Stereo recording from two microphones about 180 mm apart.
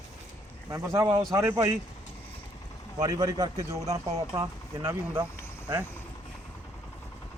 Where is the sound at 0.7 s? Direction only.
15° right (ahead or behind).